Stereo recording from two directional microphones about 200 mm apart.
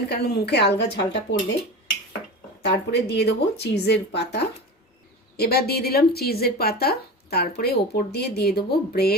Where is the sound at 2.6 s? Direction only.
60° left (ahead or behind).